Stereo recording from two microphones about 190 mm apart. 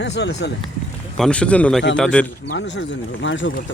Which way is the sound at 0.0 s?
65° left (ahead or behind).